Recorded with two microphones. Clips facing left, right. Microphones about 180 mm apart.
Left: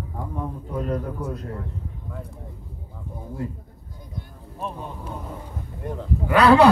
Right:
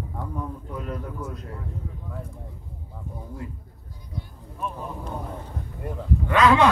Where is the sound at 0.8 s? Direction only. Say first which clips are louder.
Left 7 dB; 40° left (ahead or behind).